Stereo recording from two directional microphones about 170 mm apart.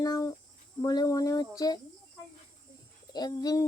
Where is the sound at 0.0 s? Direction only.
20° left (ahead or behind).